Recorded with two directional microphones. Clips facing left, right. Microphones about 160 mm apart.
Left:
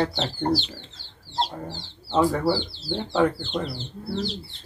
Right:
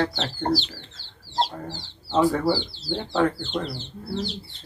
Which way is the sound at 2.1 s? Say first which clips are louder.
Right 1 dB; 10° left (ahead or behind).